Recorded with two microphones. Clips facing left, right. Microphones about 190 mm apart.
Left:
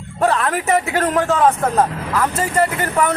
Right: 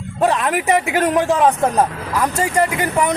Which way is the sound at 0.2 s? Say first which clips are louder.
Right 1 dB; 15° right (ahead or behind).